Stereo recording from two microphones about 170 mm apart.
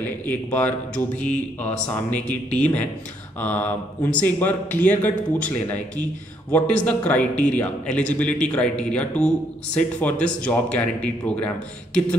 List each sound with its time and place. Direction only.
0.2 s a man's voice: 10° left (ahead or behind)